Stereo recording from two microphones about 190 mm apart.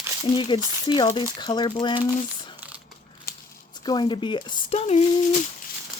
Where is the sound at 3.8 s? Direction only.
25° left (ahead or behind).